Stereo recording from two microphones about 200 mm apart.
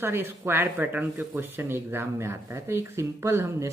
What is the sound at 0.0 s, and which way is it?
Speech, 10° right (ahead or behind).